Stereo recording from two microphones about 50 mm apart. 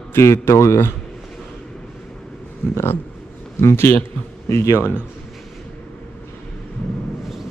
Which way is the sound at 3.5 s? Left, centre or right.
Left.